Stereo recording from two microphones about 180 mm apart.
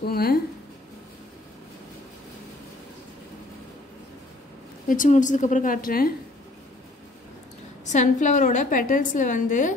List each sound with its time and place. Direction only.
0.0 s speech: 60° left (ahead or behind)
4.8 s a woman's voice: 50° left (ahead or behind)
7.8 s a woman's voice: 40° left (ahead or behind)